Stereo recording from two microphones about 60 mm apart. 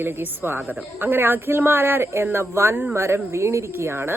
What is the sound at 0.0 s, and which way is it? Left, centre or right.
Speech, right.